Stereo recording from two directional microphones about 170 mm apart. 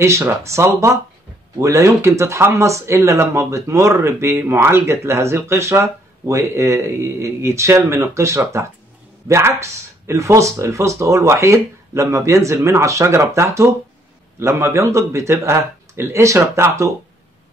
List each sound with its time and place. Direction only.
0.0 s speech: 15° right (ahead or behind)